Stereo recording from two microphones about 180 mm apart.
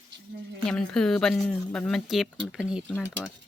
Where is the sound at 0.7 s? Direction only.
5° left (ahead or behind).